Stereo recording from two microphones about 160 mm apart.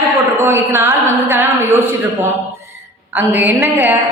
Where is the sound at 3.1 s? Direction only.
10° right (ahead or behind).